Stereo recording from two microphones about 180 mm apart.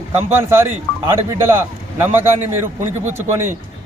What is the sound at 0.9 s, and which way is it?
Music, 5° left (ahead or behind).